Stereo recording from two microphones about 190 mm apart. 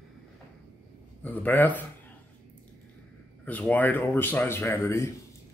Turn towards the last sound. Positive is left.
turn(degrees=15)  # may be behind; listen again after turning